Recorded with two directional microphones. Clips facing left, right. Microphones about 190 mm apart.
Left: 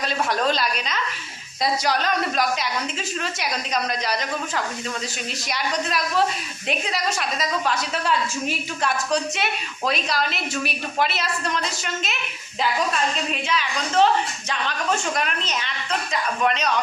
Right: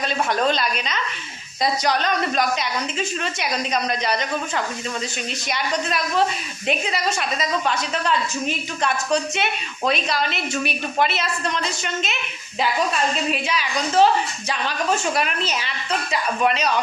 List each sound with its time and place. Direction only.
0.3 s a woman's voice: centre (ahead or behind)
5.5 s a woman's voice: centre (ahead or behind)
13.3 s a woman's voice: 10° right (ahead or behind)